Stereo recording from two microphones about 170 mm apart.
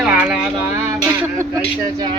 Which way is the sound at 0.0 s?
5° right (ahead or behind).